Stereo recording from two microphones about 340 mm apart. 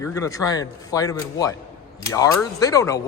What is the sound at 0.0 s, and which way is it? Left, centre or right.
Speech, centre.